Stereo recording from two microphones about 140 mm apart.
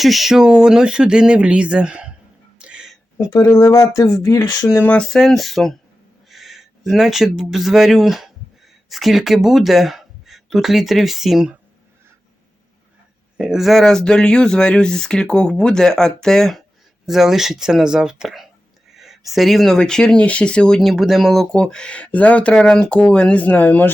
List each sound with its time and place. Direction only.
0.0 s speech: centre (ahead or behind)
2.6 s a sound: 5° right (ahead or behind)
3.2 s speech: 25° left (ahead or behind); by 11.5 s 5° right (ahead or behind)
13.3 s speech: 5° right (ahead or behind); by 23.9 s 10° left (ahead or behind)